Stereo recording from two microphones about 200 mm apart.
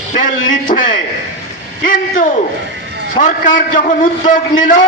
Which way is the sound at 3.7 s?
40° left (ahead or behind).